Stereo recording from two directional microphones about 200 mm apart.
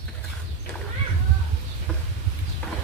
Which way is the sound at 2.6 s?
5° left (ahead or behind).